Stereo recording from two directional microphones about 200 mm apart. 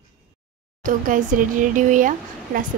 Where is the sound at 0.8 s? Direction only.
40° right (ahead or behind).